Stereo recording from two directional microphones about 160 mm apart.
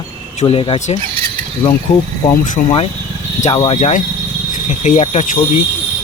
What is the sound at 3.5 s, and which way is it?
Speech, 40° left (ahead or behind).